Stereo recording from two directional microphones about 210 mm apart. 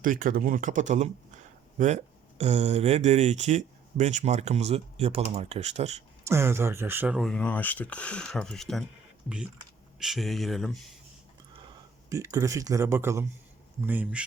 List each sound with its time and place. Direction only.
0.0 s speech: 40° right (ahead or behind)
2.4 s speech: 30° right (ahead or behind)
6.2 s speech: 10° right (ahead or behind)
10.0 s speech: centre (ahead or behind)
12.0 s speech: 15° right (ahead or behind)